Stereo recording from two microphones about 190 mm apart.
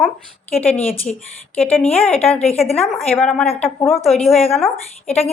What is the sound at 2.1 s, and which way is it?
Speech, 30° left (ahead or behind).